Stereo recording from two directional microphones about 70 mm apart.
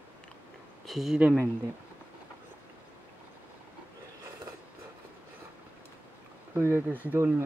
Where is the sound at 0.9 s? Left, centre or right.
Centre.